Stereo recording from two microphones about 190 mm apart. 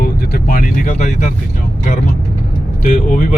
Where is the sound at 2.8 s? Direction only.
45° left (ahead or behind).